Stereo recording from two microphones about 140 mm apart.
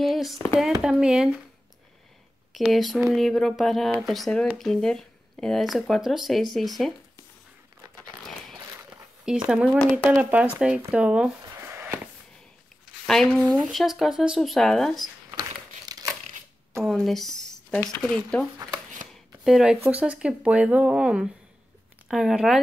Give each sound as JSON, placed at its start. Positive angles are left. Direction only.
{"t": 0.0, "sound": "a sound", "side_deg": 0}
{"t": 0.6, "sound": "speech", "side_deg": -5}
{"t": 2.5, "sound": "speech", "side_deg": 0}
{"t": 8.0, "sound": "a sound", "side_deg": 0}
{"t": 8.5, "sound": "a sound", "side_deg": -10}
{"t": 9.5, "sound": "speech", "side_deg": -10}
{"t": 9.8, "sound": "speech", "side_deg": 5}
{"t": 10.0, "sound": "speech", "side_deg": -15}
{"t": 11.5, "sound": "a sound", "side_deg": -20}
{"t": 13.0, "sound": "speech", "side_deg": 0}
{"t": 15.8, "sound": "crumpling", "side_deg": -25}
{"t": 16.8, "sound": "speech", "side_deg": 0}